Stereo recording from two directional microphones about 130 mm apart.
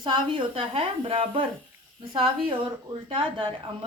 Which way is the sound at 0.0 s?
40° right (ahead or behind).